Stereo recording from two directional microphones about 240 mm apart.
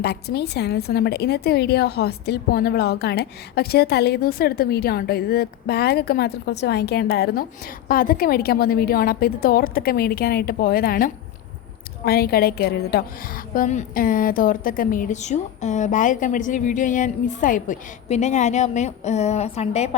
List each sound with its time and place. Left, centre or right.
0.0 s a woman's voice: left